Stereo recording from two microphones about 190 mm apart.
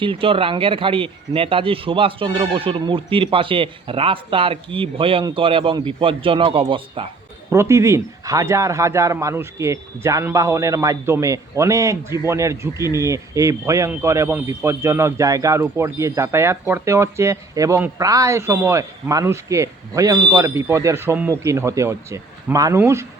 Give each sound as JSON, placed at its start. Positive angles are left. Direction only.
{"t": 0.0, "sound": "speech", "side_deg": -30}
{"t": 7.5, "sound": "a man's voice", "side_deg": -15}